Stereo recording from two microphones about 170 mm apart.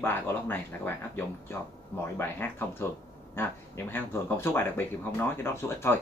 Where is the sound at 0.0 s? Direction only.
10° left (ahead or behind).